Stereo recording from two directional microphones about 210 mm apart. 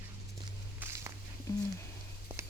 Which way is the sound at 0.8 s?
15° right (ahead or behind).